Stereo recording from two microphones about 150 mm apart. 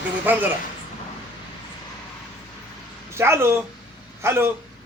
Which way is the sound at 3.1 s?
15° right (ahead or behind).